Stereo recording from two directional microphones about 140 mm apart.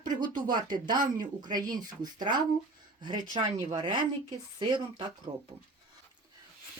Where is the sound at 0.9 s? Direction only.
75° right (ahead or behind).